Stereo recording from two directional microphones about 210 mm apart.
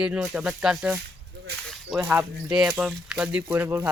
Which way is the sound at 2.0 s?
5° right (ahead or behind).